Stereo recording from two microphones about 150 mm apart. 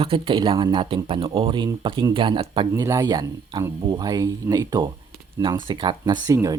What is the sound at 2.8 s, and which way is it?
Speech, 25° right (ahead or behind).